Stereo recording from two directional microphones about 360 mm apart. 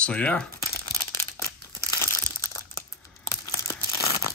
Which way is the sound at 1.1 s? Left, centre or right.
Centre.